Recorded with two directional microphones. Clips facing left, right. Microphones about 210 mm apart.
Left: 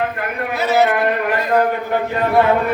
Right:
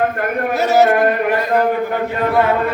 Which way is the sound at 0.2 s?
45° right (ahead or behind).